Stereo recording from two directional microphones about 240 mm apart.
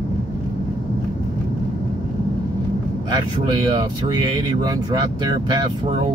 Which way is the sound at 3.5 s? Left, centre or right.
Centre.